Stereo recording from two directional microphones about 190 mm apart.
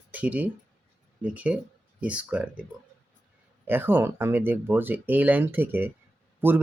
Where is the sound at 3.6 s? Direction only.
10° right (ahead or behind).